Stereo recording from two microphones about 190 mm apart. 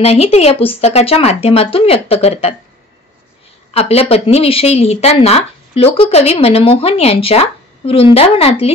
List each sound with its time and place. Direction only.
0.0 s speech: 35° left (ahead or behind)
3.7 s speech: 35° left (ahead or behind)